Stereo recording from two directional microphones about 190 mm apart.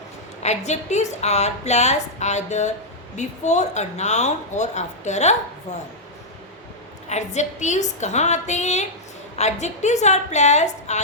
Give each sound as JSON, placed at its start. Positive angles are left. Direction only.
{"t": 0.4, "sound": "a woman's voice", "side_deg": 35}
{"t": 7.1, "sound": "a woman's voice", "side_deg": 35}